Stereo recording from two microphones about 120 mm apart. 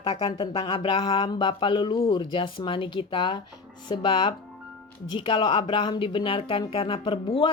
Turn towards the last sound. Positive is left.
turn(degrees=50)  # may be behind; listen again after turning